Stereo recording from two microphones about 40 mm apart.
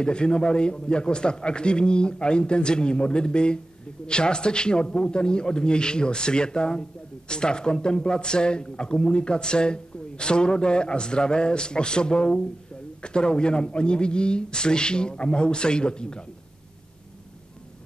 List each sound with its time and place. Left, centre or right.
0.0 s a man's voice: left